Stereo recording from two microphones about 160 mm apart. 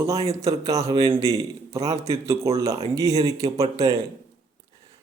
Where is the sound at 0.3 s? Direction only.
20° right (ahead or behind).